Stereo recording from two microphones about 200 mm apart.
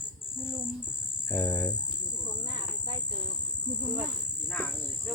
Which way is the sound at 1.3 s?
10° left (ahead or behind).